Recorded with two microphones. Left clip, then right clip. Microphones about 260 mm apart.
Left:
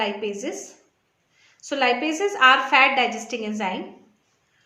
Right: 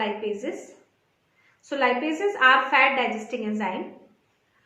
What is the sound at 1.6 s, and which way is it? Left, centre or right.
A woman's voice, left.